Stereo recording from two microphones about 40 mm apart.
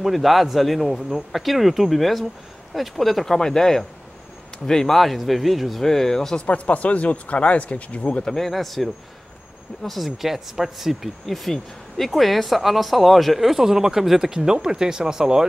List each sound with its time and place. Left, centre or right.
0.0 s speech: centre
3.3 s speech: centre
4.9 s speech: centre
5.9 s speech: centre
6.4 s speech: left
8.2 s speech: centre
8.5 s speech: centre